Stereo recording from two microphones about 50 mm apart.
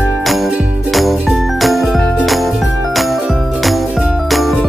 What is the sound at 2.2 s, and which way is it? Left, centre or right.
Music, centre.